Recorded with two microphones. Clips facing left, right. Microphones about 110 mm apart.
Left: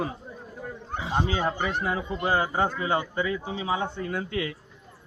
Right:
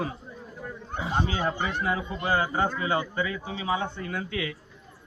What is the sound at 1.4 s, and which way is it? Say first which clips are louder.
Speech: left 1 dB; 35° left (ahead or behind).